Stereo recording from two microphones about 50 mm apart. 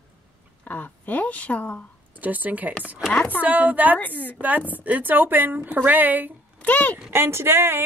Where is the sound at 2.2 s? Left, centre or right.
Right.